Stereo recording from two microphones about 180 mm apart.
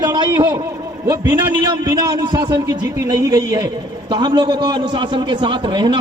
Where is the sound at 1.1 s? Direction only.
10° right (ahead or behind).